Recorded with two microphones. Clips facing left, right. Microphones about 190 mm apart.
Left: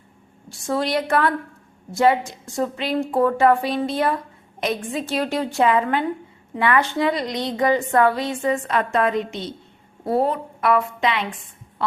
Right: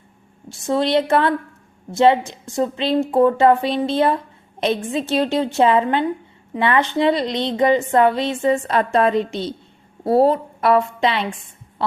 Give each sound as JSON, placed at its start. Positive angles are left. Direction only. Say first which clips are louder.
{"t": 0.4, "sound": "a woman's voice", "louder": "right 4 dB", "side_deg": -25}